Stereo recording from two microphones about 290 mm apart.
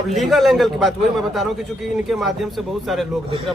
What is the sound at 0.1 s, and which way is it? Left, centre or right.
Speech, centre.